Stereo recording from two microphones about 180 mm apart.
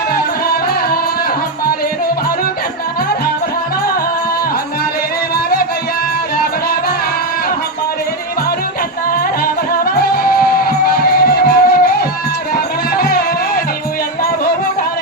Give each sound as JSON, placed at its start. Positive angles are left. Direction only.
{"t": 9.4, "sound": "music", "side_deg": 55}
{"t": 13.0, "sound": "music", "side_deg": 60}